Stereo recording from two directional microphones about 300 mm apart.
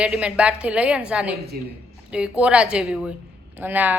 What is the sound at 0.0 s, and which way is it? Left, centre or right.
A woman's voice, centre.